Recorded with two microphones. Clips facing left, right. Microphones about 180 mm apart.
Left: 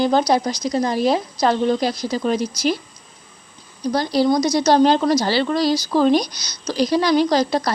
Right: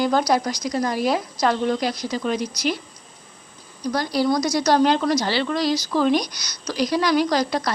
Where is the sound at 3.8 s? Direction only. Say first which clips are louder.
Left 4 dB; 25° left (ahead or behind).